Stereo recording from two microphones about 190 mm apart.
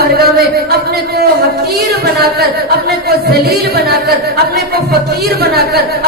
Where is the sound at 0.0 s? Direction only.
55° right (ahead or behind).